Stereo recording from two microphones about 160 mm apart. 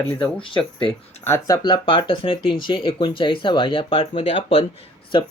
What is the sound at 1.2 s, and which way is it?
Speech, 20° left (ahead or behind).